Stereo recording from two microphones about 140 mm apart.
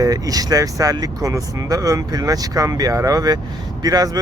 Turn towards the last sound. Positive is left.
turn(degrees=-25)  # may be behind; listen again after turning